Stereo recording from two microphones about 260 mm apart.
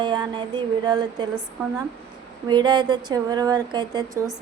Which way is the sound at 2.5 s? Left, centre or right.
Centre.